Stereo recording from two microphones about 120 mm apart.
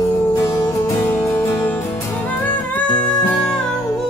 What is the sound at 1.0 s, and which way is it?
Music, 10° left (ahead or behind).